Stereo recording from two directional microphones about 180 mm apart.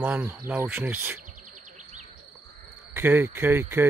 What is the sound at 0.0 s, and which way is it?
Speech, 10° right (ahead or behind).